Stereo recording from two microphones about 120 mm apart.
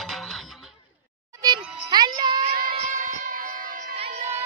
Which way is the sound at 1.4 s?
35° right (ahead or behind).